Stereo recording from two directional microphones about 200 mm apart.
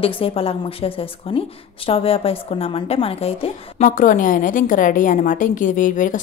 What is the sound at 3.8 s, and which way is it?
A woman's voice, 40° left (ahead or behind).